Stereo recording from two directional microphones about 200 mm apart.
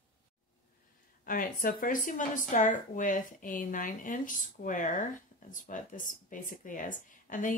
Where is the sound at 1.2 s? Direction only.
45° left (ahead or behind).